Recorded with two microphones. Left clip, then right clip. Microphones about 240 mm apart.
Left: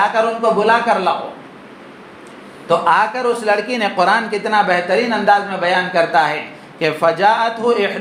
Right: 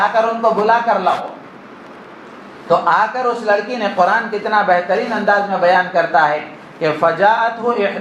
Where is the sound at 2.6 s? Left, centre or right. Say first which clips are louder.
Even; left.